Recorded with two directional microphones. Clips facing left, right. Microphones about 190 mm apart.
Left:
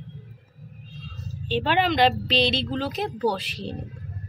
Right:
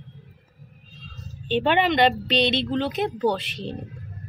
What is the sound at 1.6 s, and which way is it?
Speech, centre (ahead or behind).